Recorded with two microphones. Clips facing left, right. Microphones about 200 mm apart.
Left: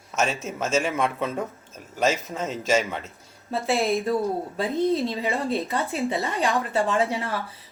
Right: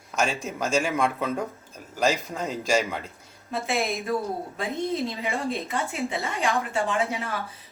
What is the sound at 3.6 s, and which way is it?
Speech, 35° left (ahead or behind).